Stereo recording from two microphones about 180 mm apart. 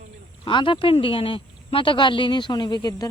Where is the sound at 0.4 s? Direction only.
30° left (ahead or behind).